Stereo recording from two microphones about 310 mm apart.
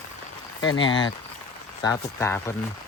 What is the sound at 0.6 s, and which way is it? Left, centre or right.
Speech, left.